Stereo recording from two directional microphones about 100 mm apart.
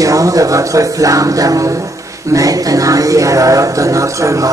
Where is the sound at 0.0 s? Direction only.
35° right (ahead or behind).